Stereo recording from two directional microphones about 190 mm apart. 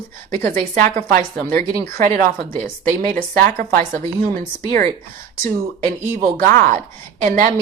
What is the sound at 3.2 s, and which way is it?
Speech, 50° right (ahead or behind).